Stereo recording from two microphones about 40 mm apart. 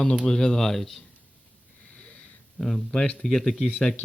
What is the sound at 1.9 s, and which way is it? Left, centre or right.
Wheeze, left.